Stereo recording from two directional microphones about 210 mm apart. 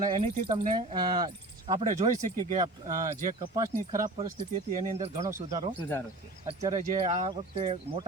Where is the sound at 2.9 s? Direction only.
40° right (ahead or behind).